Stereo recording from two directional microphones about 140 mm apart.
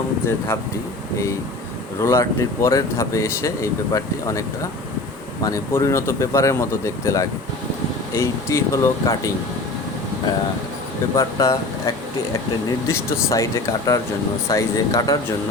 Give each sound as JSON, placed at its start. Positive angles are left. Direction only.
{"t": 0.3, "sound": "speech", "side_deg": 20}
{"t": 2.0, "sound": "speech", "side_deg": 20}
{"t": 11.2, "sound": "speech", "side_deg": 25}
{"t": 12.9, "sound": "speech", "side_deg": 25}